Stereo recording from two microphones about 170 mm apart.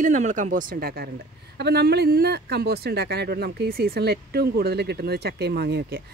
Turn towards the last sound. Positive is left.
turn(degrees=-70)  # may be behind; listen again after turning